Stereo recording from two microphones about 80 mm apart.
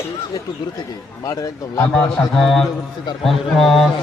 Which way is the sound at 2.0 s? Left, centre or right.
Centre.